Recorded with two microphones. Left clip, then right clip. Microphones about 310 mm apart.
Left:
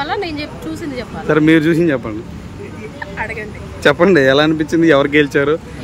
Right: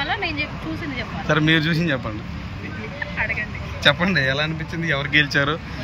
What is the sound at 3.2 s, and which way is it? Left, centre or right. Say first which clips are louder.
Speech: even; centre.